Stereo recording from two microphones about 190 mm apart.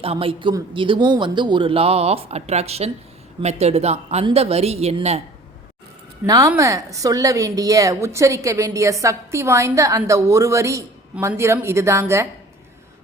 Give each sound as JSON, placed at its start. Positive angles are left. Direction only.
{"t": 0.0, "sound": "speech", "side_deg": -30}
{"t": 6.2, "sound": "a woman's voice", "side_deg": -20}